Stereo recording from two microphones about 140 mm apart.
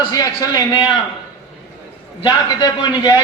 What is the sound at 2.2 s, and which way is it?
Speech, 30° left (ahead or behind).